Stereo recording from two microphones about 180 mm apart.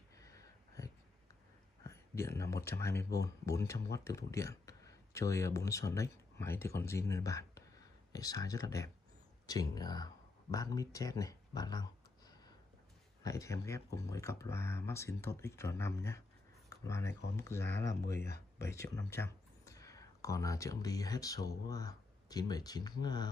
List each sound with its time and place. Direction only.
0.2 s a sound: 20° left (ahead or behind)
1.9 s speech: 15° left (ahead or behind)
13.2 s speech: 15° left (ahead or behind)